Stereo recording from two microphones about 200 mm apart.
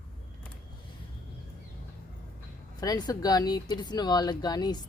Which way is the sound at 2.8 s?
20° left (ahead or behind).